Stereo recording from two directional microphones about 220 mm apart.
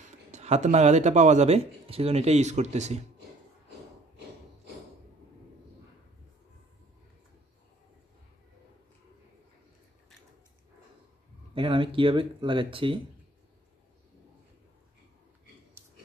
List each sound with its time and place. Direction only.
0.0 s speech: 30° right (ahead or behind)
11.5 s speech: 25° right (ahead or behind)